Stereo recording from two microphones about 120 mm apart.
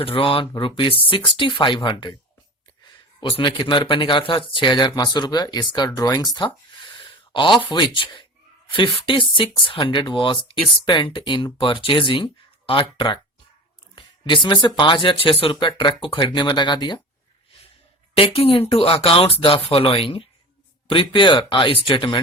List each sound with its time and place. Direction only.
0.0 s speech: 50° left (ahead or behind)
3.2 s speech: 45° left (ahead or behind)
18.3 s speech: 50° left (ahead or behind)